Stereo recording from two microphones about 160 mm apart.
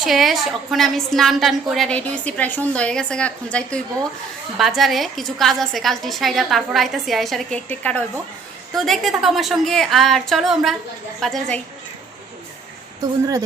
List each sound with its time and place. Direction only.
0.0 s a woman's voice: centre (ahead or behind)
13.0 s speech: 20° right (ahead or behind)